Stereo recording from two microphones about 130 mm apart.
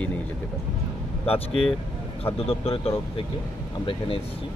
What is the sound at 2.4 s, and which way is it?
A man's voice, 50° left (ahead or behind).